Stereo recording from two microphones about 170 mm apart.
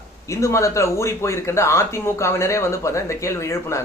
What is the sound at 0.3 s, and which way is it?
Speech, 15° left (ahead or behind).